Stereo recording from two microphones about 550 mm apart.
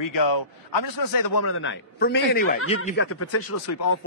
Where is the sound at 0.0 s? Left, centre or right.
Left.